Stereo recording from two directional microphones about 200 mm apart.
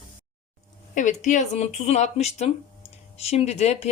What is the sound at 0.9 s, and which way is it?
Speech, 40° left (ahead or behind).